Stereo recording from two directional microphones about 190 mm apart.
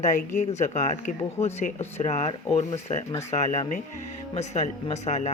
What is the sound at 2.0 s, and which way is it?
Speech, 35° left (ahead or behind).